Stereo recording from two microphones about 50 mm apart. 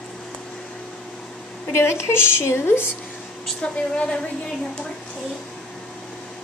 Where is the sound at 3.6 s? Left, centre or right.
Left.